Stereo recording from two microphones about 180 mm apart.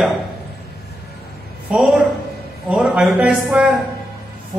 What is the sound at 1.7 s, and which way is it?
A man's voice, 5° right (ahead or behind).